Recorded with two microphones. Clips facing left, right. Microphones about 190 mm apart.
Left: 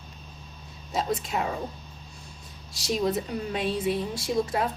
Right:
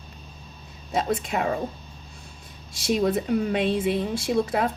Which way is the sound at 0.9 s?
65° right (ahead or behind).